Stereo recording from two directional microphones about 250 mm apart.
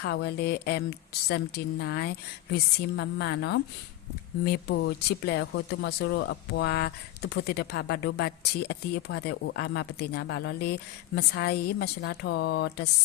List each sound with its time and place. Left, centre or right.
0.0 s speech: left